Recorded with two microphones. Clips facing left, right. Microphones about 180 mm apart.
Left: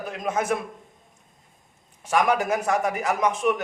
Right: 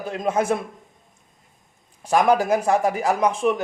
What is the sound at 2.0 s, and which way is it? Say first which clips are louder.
Speech: right 4 dB; 35° right (ahead or behind).